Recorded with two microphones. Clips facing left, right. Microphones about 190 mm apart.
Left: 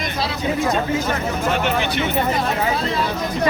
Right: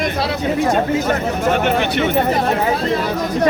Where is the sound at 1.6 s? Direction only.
55° right (ahead or behind).